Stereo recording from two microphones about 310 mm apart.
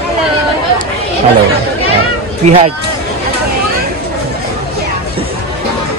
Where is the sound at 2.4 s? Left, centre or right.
Right.